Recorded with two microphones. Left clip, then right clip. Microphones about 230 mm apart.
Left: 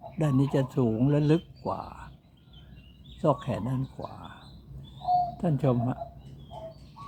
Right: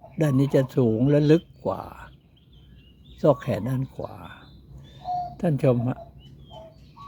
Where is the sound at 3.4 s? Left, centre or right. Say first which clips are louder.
Right 5 dB; right.